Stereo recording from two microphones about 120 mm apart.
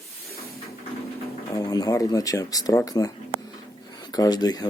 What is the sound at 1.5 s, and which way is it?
Speech, 35° left (ahead or behind).